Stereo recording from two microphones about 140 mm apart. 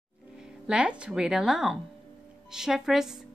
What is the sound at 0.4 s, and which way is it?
Speech, 5° right (ahead or behind).